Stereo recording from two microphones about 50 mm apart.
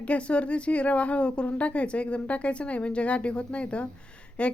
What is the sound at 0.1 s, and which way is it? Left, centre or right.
A woman's voice, left.